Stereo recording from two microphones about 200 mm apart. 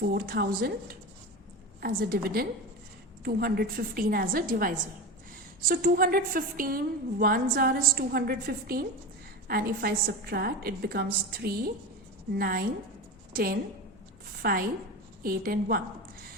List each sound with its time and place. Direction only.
0.0 s a woman's voice: 50° right (ahead or behind)